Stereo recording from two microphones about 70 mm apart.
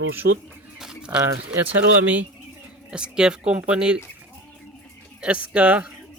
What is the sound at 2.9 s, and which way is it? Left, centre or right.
Speech, centre.